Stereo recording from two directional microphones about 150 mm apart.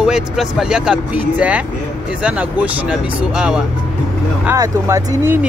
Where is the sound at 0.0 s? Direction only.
5° right (ahead or behind).